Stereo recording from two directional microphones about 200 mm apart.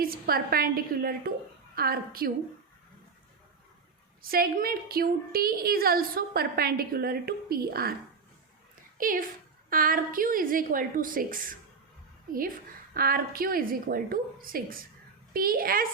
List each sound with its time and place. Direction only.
0.0 s a woman's voice: 50° right (ahead or behind)
4.2 s a woman's voice: 45° right (ahead or behind)
9.0 s a woman's voice: 45° right (ahead or behind)
12.9 s a woman's voice: 50° right (ahead or behind)